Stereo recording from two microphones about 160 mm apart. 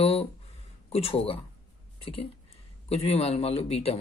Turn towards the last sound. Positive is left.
turn(degrees=40)  # may be behind; listen again after turning